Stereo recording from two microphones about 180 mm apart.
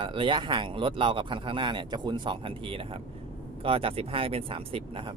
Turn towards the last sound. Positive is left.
turn(degrees=-30)  # may be behind; listen again after turning